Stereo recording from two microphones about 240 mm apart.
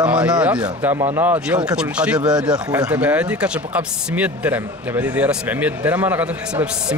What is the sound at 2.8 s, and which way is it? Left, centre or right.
Speech, centre.